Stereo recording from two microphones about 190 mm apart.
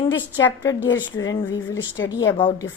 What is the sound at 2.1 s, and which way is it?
Speech, 20° left (ahead or behind).